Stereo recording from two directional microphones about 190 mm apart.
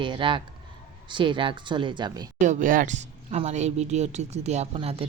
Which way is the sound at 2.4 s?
40° right (ahead or behind).